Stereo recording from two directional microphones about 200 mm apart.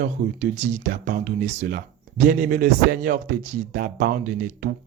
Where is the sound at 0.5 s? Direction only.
40° right (ahead or behind).